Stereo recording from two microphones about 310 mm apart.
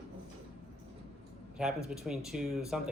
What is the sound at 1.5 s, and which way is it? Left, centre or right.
Speech, centre.